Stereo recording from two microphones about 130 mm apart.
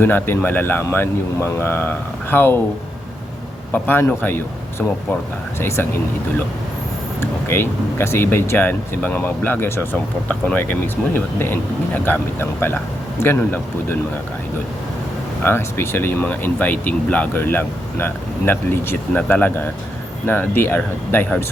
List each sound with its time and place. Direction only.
0.0 s speech: 15° left (ahead or behind)
3.7 s speech: 15° left (ahead or behind)
5.5 s speech: 20° left (ahead or behind)
7.2 s speech: 15° left (ahead or behind)
15.4 s speech: 20° left (ahead or behind)